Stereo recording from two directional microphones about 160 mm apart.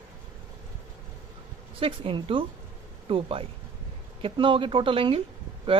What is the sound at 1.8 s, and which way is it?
A man's voice, 35° right (ahead or behind).